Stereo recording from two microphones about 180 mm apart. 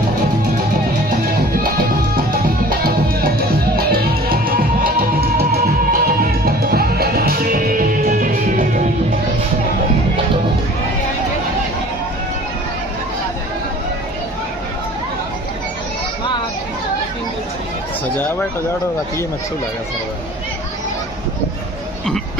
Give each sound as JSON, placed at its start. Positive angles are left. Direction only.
{"t": 1.6, "sound": "music", "side_deg": -55}